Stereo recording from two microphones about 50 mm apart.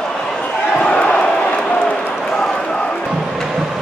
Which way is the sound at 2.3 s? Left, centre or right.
Centre.